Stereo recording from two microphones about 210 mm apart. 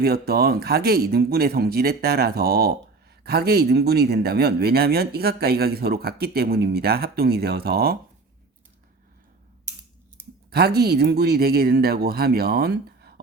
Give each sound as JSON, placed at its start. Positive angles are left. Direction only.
{"t": 0.0, "sound": "speech", "side_deg": -45}
{"t": 10.2, "sound": "a sound", "side_deg": -10}
{"t": 10.5, "sound": "speech", "side_deg": -50}